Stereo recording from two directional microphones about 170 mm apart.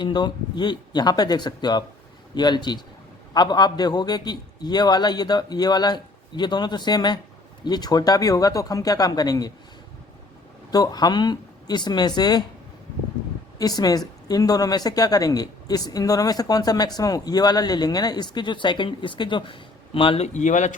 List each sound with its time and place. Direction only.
0.0 s a woman's voice: 25° left (ahead or behind)
10.7 s a woman's voice: 25° left (ahead or behind)
13.6 s a woman's voice: 20° left (ahead or behind); by 20.7 s 45° left (ahead or behind)